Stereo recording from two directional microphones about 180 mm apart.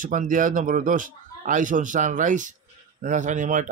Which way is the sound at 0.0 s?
45° right (ahead or behind).